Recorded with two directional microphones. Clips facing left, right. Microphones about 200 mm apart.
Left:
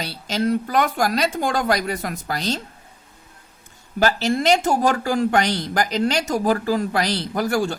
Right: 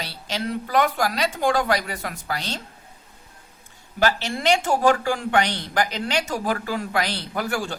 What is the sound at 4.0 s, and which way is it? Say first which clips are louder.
A woman's voice: left 4 dB; 40° left (ahead or behind).